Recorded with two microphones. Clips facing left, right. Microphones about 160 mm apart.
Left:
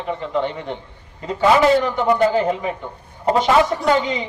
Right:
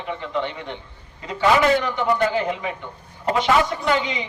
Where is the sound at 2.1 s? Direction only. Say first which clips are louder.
Left 6 dB; 40° left (ahead or behind).